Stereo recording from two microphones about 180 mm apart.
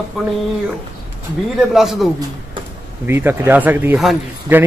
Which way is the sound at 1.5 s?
Centre (ahead or behind).